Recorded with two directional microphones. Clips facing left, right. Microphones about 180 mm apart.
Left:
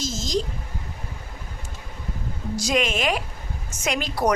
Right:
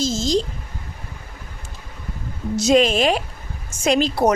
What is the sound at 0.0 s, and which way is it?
Speech, 30° right (ahead or behind).